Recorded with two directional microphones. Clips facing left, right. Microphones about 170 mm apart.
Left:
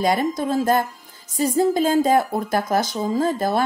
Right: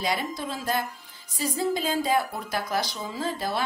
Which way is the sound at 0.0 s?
50° left (ahead or behind).